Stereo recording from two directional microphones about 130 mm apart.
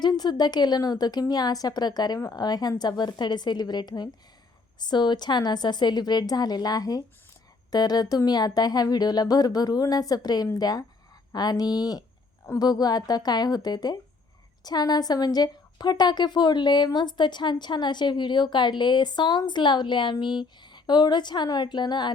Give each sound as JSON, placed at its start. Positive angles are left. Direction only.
{"t": 0.0, "sound": "a woman's voice", "side_deg": 30}